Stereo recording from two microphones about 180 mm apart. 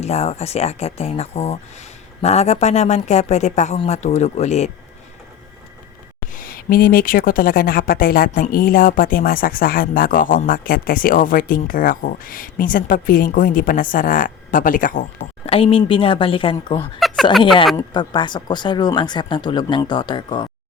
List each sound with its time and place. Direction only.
0.0 s speech: 35° left (ahead or behind)
6.3 s speech: 55° left (ahead or behind)
15.4 s speech: 30° left (ahead or behind)
17.0 s a sound: centre (ahead or behind)
17.7 s speech: 25° left (ahead or behind)